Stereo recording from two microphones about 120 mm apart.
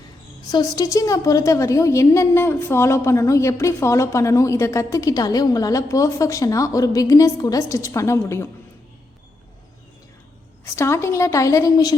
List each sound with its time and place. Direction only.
0.5 s a woman's voice: 35° left (ahead or behind)
10.8 s a woman's voice: 25° left (ahead or behind)